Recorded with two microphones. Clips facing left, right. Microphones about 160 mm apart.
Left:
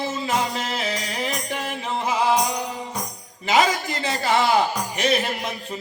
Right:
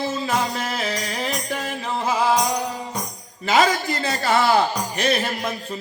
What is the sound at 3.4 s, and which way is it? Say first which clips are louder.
Music: right 1 dB; 15° left (ahead or behind).